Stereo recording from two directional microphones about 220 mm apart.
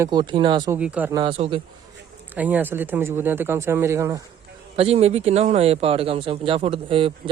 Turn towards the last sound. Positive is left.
turn(degrees=-25)  # may be behind; listen again after turning